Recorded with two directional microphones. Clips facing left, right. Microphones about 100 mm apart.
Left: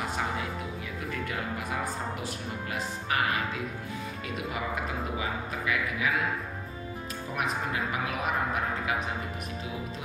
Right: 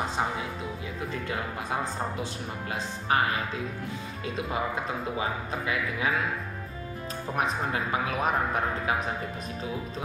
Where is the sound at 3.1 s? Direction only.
30° right (ahead or behind).